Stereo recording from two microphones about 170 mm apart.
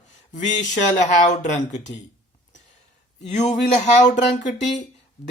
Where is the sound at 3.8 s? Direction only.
45° left (ahead or behind).